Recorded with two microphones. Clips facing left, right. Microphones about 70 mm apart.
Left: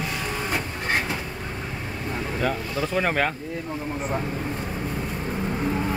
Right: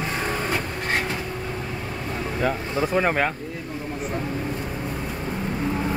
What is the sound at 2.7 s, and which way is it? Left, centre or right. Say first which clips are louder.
Speech: right 3 dB; right.